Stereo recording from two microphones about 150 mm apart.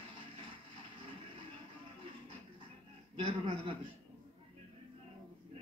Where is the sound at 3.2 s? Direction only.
35° right (ahead or behind).